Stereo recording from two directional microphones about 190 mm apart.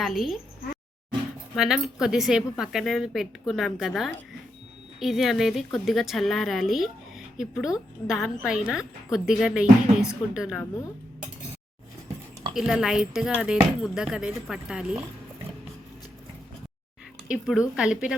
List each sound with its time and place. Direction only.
0.0 s a woman's voice: centre (ahead or behind)
1.5 s a woman's voice: centre (ahead or behind)
12.5 s a woman's voice: 5° right (ahead or behind)
17.2 s a woman's voice: 5° right (ahead or behind)